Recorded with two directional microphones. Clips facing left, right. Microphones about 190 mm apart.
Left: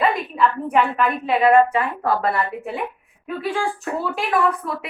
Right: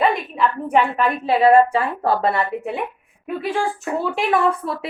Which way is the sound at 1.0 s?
30° right (ahead or behind).